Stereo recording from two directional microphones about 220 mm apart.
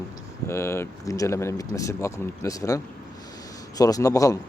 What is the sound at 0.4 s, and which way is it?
Speech, 10° left (ahead or behind).